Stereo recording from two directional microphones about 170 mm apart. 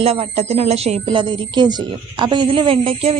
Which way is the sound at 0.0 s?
35° right (ahead or behind).